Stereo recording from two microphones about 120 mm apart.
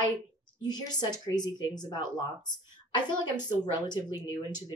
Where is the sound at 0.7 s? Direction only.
35° left (ahead or behind).